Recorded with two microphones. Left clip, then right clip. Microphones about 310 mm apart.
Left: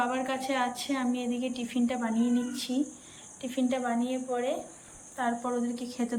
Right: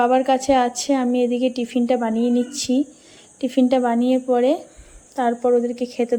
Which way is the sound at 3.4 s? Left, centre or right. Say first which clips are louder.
Right 13 dB; centre.